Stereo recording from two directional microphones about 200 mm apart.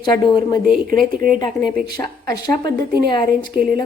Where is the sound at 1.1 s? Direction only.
45° right (ahead or behind).